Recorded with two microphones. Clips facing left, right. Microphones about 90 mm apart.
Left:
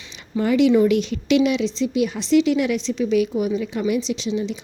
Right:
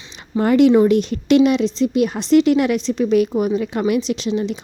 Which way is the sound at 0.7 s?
40° right (ahead or behind).